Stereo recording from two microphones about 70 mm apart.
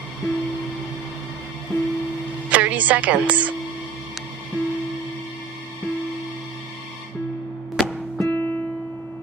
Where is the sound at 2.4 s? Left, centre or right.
Centre.